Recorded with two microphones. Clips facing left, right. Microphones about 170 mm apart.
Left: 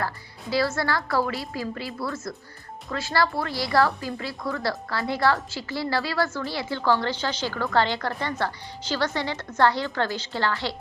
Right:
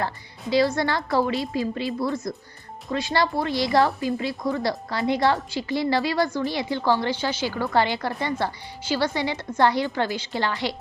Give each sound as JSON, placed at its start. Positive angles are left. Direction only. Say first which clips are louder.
{"t": 0.5, "sound": "a woman's voice", "louder": "right 3 dB", "side_deg": -20}